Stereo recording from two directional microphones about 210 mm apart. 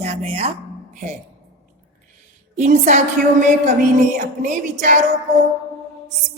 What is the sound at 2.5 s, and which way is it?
Speech, 35° right (ahead or behind).